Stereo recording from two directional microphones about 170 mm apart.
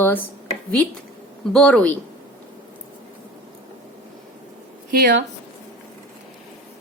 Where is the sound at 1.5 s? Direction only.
5° left (ahead or behind).